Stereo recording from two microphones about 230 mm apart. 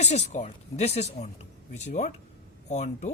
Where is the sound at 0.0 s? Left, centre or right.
Left.